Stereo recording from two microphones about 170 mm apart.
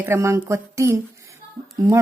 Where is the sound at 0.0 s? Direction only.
15° right (ahead or behind).